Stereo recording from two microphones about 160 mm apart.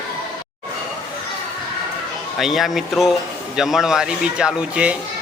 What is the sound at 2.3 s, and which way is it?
Speech, centre (ahead or behind).